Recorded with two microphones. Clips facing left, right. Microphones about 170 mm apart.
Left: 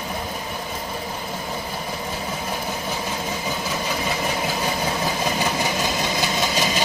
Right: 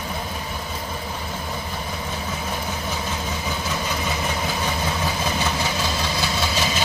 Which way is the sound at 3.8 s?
10° left (ahead or behind).